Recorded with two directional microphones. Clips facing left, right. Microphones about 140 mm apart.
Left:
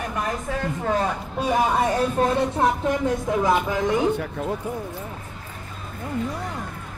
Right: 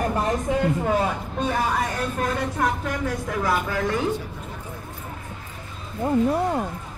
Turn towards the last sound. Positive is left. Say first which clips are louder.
# right 8 dB
turn(degrees=-60)  # may be behind; listen again after turning